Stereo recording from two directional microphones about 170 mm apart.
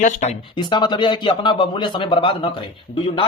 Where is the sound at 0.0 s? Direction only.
40° left (ahead or behind).